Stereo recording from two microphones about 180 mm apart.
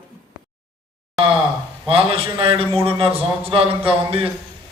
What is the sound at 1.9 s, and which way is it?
Speech, 30° right (ahead or behind).